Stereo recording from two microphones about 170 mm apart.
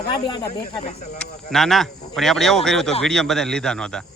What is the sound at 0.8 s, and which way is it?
Speech, 40° left (ahead or behind).